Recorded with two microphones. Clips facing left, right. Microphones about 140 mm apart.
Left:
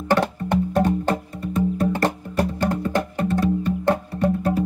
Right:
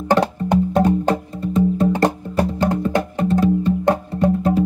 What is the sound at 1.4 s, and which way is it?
Music, 25° right (ahead or behind).